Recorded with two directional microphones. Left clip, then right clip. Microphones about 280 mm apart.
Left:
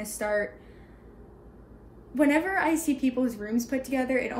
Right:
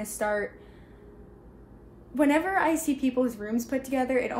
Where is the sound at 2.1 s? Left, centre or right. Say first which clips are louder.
Even; centre.